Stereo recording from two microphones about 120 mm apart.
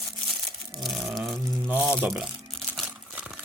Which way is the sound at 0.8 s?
Centre (ahead or behind).